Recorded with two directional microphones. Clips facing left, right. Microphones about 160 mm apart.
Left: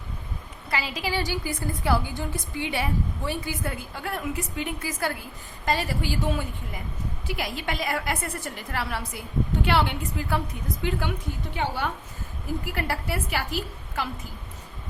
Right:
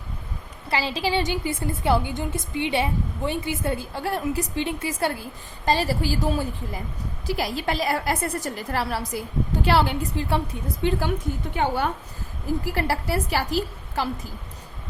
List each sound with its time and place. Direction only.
0.7 s a woman's voice: 30° right (ahead or behind)
11.5 s a woman's voice: 50° right (ahead or behind)
12.6 s a woman's voice: 35° right (ahead or behind)